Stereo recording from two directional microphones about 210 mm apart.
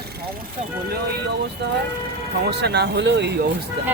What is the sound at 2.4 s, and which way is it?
Speech, 50° right (ahead or behind).